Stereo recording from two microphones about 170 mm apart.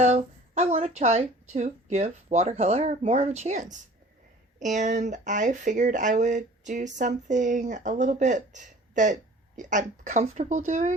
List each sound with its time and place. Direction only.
0.0 s speech: 40° right (ahead or behind)